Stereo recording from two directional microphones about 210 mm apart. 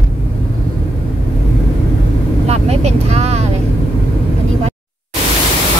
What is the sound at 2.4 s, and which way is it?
Vehicle, 30° right (ahead or behind).